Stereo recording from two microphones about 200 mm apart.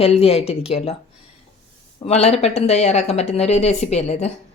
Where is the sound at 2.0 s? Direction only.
30° left (ahead or behind).